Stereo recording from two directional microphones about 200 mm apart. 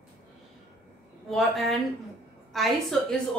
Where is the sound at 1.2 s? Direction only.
Centre (ahead or behind).